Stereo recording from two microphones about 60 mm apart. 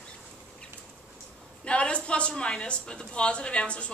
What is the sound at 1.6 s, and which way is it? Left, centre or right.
A woman's voice, centre.